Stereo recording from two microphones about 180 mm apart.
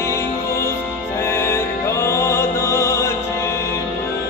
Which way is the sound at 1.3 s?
15° left (ahead or behind).